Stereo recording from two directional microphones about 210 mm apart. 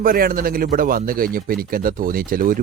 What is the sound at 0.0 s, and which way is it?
Speech, 45° right (ahead or behind).